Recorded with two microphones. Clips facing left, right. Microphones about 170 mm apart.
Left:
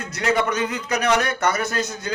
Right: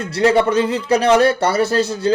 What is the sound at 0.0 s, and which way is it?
A man's voice, 30° right (ahead or behind).